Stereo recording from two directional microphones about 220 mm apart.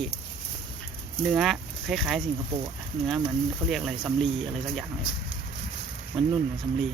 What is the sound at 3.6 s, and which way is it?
Speech, centre (ahead or behind).